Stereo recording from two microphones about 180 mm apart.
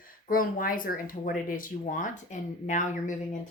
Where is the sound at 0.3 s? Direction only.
50° left (ahead or behind).